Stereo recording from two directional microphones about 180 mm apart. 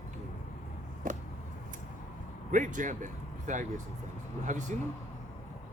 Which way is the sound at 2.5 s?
45° right (ahead or behind).